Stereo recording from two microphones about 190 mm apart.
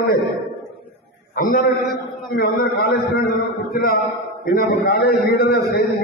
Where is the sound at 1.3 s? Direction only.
50° left (ahead or behind).